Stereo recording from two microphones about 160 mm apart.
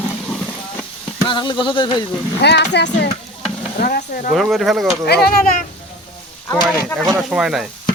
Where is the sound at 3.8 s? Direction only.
70° left (ahead or behind).